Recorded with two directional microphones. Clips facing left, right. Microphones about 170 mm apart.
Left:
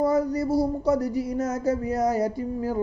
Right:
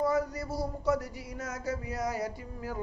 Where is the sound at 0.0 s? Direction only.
40° left (ahead or behind).